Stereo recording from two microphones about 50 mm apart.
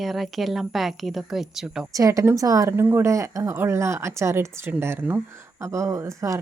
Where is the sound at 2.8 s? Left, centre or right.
Right.